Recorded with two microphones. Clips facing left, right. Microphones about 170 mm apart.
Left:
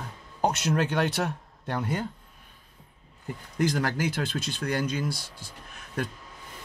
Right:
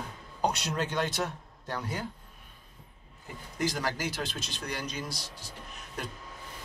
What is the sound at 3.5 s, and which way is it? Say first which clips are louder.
Speech: left 5 dB; 55° left (ahead or behind).